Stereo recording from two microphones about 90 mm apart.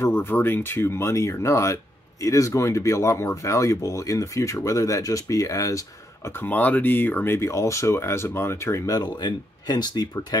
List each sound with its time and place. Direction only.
0.0 s speech: 25° left (ahead or behind)
6.3 s speech: 20° left (ahead or behind); by 10.2 s 50° left (ahead or behind)